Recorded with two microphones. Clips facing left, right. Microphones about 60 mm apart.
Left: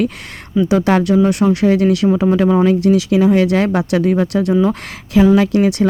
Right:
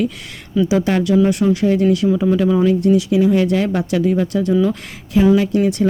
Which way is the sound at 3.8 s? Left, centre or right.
Left.